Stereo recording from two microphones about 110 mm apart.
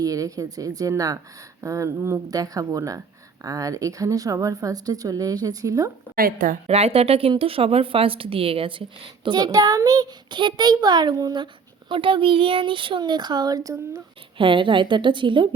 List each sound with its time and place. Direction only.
0.0 s a woman's voice: 30° right (ahead or behind)
6.7 s speech: 70° right (ahead or behind)
9.2 s a woman's voice: 40° right (ahead or behind)
11.9 s speech: 50° right (ahead or behind); by 13.7 s 35° right (ahead or behind)
14.3 s speech: 50° right (ahead or behind)